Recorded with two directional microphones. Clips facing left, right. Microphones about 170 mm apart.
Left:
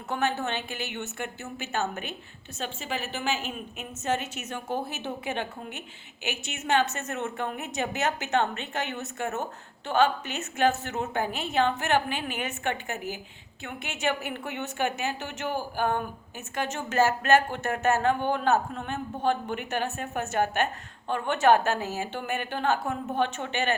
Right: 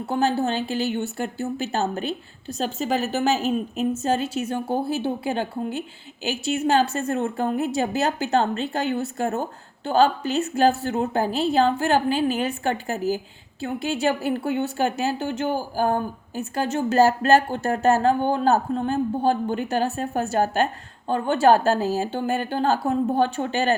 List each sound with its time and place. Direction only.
0.0 s a woman's voice: 35° right (ahead or behind)